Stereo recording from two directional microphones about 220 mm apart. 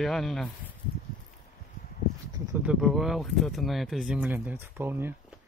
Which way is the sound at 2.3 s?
15° right (ahead or behind).